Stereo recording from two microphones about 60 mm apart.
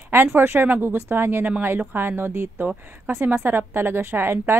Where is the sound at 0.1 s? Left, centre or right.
Right.